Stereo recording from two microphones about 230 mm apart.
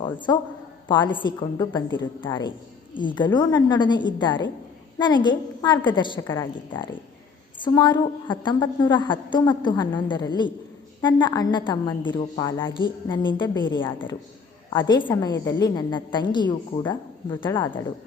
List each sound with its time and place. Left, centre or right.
0.3 s a woman's voice: centre